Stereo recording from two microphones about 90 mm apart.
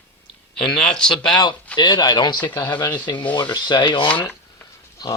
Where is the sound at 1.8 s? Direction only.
55° left (ahead or behind).